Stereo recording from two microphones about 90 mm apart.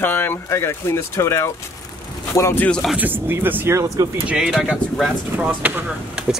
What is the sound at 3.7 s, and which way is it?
Speech, 40° right (ahead or behind).